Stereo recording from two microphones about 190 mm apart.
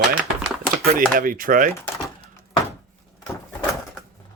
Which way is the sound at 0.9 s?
50° right (ahead or behind).